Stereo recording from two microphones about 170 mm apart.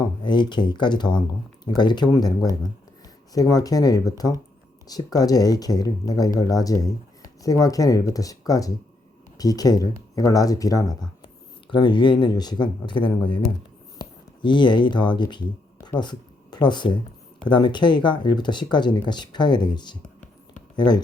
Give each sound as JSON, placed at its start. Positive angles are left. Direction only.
{"t": 0.2, "sound": "speech", "side_deg": 25}